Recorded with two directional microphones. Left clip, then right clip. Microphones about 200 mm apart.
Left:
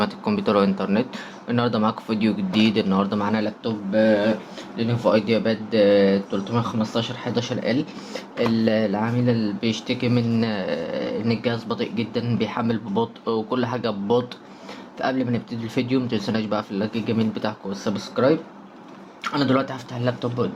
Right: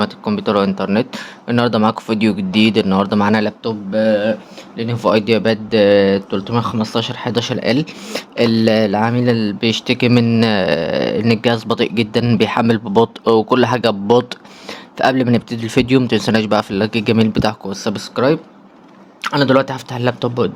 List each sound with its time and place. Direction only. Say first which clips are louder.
0.0 s speech: right 4 dB; 25° right (ahead or behind); by 20.5 s 55° right (ahead or behind)